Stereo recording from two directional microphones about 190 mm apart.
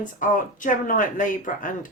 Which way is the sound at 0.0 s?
45° left (ahead or behind).